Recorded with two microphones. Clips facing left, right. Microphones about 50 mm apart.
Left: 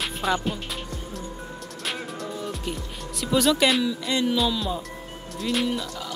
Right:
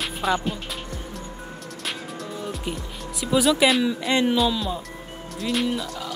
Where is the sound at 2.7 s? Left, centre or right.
Centre.